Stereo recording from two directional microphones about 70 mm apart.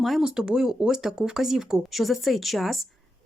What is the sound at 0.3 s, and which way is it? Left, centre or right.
Speech, centre.